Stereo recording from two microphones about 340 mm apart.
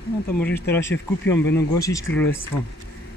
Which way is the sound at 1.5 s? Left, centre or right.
Left.